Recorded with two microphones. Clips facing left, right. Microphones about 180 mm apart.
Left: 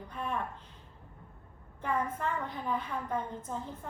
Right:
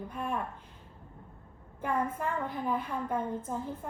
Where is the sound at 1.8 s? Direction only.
10° right (ahead or behind).